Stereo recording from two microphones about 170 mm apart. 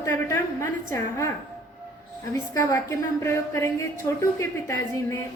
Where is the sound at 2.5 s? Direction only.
20° left (ahead or behind).